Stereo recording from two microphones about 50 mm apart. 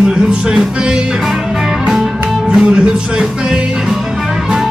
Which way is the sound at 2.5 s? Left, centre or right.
Centre.